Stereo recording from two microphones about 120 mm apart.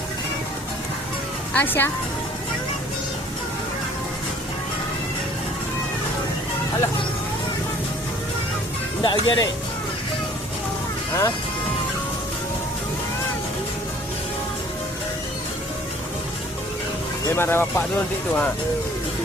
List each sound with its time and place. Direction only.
1.5 s speech: 15° left (ahead or behind)
9.0 s speech: 40° left (ahead or behind)
17.3 s speech: 20° left (ahead or behind)